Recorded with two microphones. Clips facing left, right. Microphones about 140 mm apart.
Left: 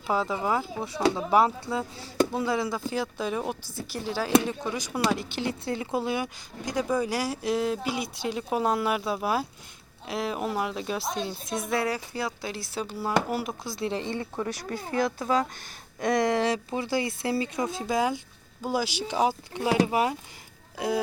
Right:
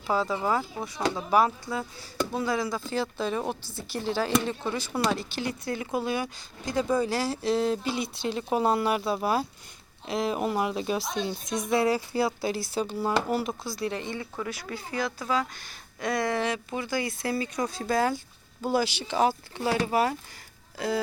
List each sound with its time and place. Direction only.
0.1 s speech: 15° left (ahead or behind)
11.7 s speech: 25° right (ahead or behind)
12.5 s speech: centre (ahead or behind)
13.7 s speech: 25° left (ahead or behind)
14.7 s speech: 50° left (ahead or behind)
16.0 s speech: 40° left (ahead or behind); by 21.0 s 15° left (ahead or behind)